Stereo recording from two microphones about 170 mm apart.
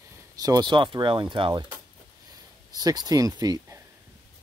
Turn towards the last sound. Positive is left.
turn(degrees=-20)  # may be behind; listen again after turning